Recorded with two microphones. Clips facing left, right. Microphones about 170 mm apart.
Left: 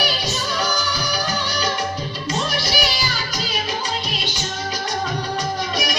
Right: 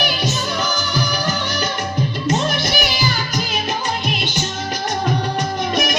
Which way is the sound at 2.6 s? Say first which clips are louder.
Right 3 dB; 55° right (ahead or behind).